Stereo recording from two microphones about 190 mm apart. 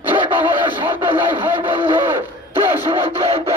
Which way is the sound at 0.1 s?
20° right (ahead or behind).